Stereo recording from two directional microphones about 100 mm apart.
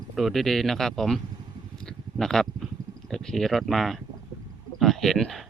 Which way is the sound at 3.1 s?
5° left (ahead or behind).